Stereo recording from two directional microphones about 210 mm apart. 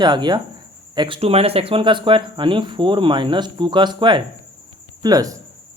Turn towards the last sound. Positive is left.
turn(degrees=-15)  # may be behind; listen again after turning